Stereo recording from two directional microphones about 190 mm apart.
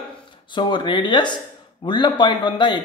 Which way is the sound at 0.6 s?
25° left (ahead or behind).